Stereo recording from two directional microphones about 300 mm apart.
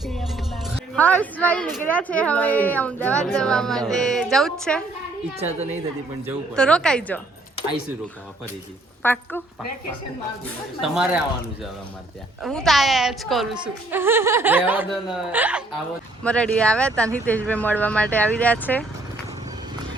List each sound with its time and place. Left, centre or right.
0.0 s music: centre
0.9 s a woman's voice: centre
5.4 s a woman's voice: right
6.6 s a woman's voice: centre
9.0 s a woman's voice: centre
10.9 s a woman's voice: centre
12.4 s a woman's voice: centre